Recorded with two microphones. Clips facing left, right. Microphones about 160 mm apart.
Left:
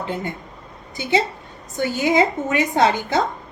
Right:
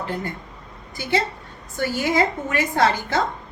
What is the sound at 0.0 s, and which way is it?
Speech, 20° left (ahead or behind).